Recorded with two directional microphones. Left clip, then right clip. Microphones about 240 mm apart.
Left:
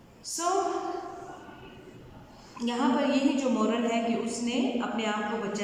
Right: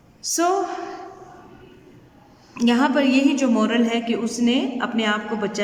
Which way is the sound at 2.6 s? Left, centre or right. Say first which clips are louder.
Right 8 dB; right.